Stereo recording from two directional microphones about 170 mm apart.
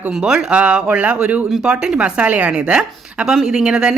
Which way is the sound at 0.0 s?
5° right (ahead or behind).